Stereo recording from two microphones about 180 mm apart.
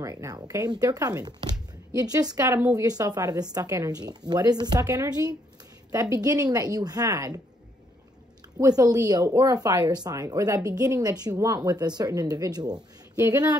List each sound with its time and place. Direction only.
0.0 s speech: 20° right (ahead or behind)
8.5 s speech: 20° right (ahead or behind)